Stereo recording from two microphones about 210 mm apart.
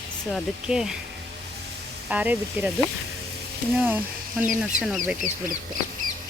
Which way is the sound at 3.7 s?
10° right (ahead or behind).